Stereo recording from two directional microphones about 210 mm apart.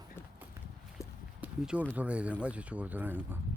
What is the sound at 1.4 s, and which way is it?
Speech, 5° right (ahead or behind).